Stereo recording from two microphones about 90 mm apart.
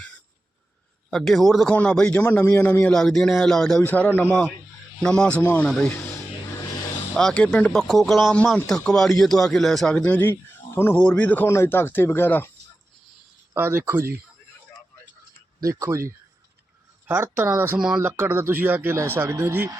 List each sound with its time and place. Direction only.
1.1 s a man's voice: centre (ahead or behind)
1.7 s speech: 15° left (ahead or behind)
2.1 s speech: 25° left (ahead or behind)
2.9 s a man's voice: 5° left (ahead or behind)
3.8 s speech: 20° left (ahead or behind)
7.2 s speech: 10° left (ahead or behind)
7.7 s a man's voice: centre (ahead or behind); by 11.4 s 15° left (ahead or behind)
11.4 s speech: 30° left (ahead or behind)
13.5 s speech: 30° right (ahead or behind)
15.6 s speech: 35° right (ahead or behind)
17.7 s speech: 5° right (ahead or behind)
18.0 s speech: 25° right (ahead or behind)